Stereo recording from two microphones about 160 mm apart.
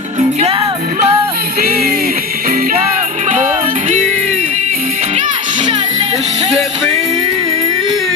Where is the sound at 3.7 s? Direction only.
55° right (ahead or behind).